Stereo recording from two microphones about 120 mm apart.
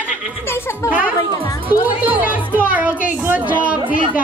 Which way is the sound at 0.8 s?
15° right (ahead or behind).